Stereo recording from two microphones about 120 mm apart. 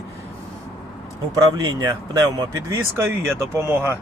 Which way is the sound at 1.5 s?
30° right (ahead or behind).